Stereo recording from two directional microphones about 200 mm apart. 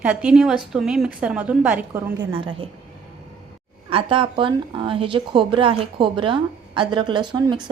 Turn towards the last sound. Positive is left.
turn(degrees=-20)  # may be behind; listen again after turning